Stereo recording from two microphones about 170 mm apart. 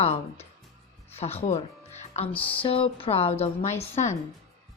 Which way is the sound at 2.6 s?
35° left (ahead or behind).